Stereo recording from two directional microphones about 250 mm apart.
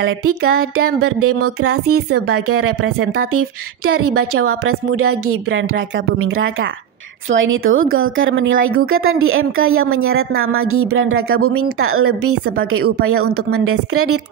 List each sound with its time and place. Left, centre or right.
0.0 s a woman's voice: right